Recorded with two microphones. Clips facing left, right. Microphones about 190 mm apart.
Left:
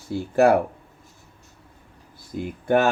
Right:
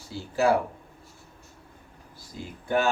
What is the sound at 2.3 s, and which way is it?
Speech, 55° left (ahead or behind).